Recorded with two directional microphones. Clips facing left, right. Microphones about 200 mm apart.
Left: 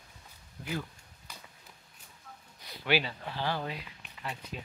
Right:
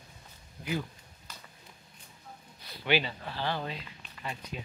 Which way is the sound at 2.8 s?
5° left (ahead or behind).